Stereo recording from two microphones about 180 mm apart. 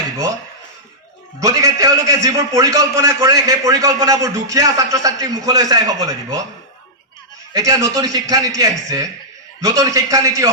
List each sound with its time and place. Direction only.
1.4 s a man's voice: 20° right (ahead or behind)
7.5 s a man's voice: 20° right (ahead or behind)